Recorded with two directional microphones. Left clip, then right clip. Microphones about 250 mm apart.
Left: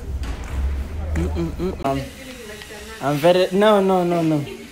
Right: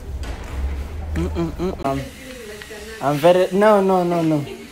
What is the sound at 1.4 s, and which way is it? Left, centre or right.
Speech, centre.